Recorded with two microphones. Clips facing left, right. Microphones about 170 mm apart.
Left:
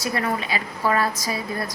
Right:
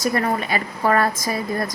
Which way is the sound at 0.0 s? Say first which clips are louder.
Right 4 dB; 45° right (ahead or behind).